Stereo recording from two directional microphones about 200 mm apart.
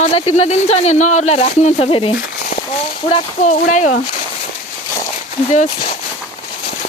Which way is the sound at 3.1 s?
35° left (ahead or behind).